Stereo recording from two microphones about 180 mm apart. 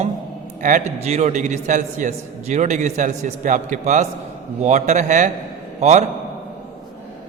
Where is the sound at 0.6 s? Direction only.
40° right (ahead or behind).